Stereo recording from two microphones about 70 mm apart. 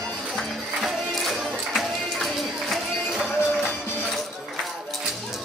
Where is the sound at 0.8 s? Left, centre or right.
Centre.